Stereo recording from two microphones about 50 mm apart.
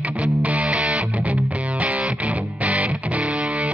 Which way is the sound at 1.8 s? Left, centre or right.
Right.